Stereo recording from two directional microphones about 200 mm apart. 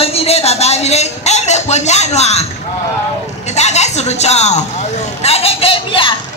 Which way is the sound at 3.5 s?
35° left (ahead or behind).